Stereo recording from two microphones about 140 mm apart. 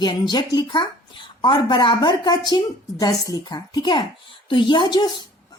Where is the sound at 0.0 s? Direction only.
30° left (ahead or behind).